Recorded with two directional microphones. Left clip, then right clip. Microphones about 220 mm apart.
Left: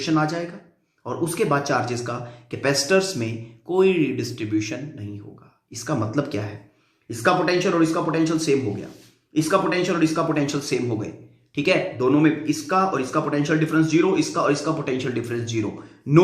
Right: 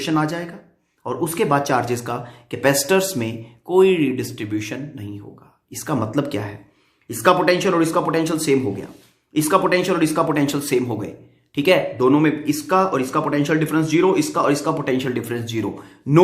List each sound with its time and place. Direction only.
0.0 s speech: 30° right (ahead or behind)